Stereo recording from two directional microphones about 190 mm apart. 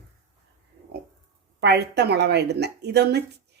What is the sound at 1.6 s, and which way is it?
Speech, 60° right (ahead or behind).